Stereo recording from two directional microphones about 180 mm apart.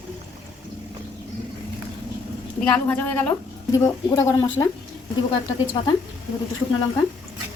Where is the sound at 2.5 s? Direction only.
5° left (ahead or behind).